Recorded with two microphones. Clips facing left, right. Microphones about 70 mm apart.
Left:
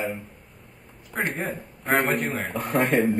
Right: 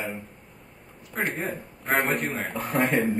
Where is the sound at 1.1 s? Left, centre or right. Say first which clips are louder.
Left 1 dB; centre.